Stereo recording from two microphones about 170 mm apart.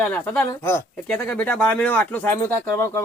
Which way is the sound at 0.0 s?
15° left (ahead or behind).